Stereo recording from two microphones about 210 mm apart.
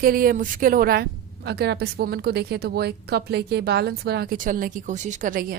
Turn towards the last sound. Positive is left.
turn(degrees=-40)  # may be behind; listen again after turning